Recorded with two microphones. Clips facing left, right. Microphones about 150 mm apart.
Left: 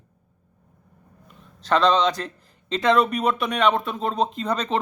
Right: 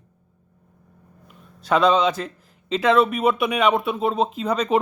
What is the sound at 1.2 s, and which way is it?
A man's voice, 10° right (ahead or behind).